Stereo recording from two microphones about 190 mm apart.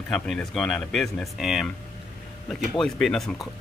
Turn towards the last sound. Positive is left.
turn(degrees=0)  # may be behind; listen again after turning